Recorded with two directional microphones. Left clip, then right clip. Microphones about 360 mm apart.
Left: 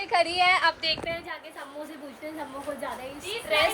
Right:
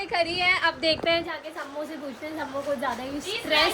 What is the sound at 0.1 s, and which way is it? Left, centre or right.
Speech, centre.